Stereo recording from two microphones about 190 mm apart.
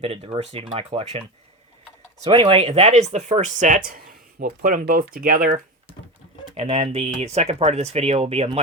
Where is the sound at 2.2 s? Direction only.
30° right (ahead or behind); by 5.5 s 50° right (ahead or behind).